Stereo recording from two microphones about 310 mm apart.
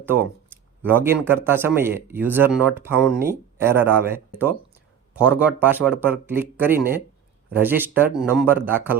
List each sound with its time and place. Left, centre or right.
0.0 s speech: centre